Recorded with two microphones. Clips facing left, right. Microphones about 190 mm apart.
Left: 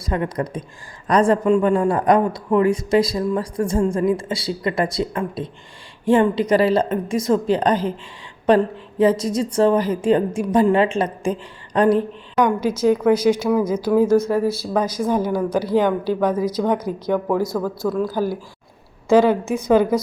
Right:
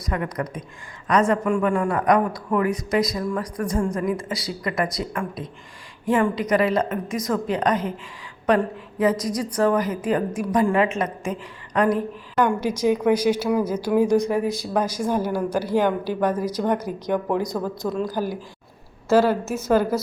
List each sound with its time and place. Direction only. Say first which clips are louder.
0.0 s a man's voice: left 4 dB; 30° left (ahead or behind)
12.6 s a woman's voice: left 3 dB; 10° right (ahead or behind)